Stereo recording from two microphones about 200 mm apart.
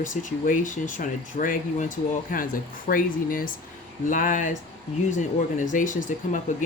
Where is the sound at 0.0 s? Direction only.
40° left (ahead or behind).